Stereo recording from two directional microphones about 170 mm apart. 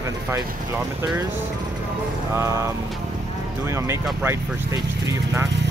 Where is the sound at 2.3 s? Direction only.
15° right (ahead or behind).